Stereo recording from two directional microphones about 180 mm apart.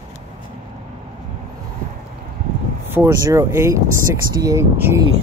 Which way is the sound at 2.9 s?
15° right (ahead or behind).